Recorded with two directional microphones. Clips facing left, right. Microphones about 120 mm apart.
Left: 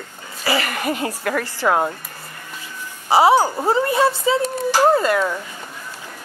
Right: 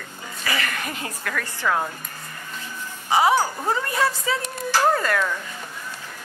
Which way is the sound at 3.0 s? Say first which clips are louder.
Left 5 dB; 30° left (ahead or behind).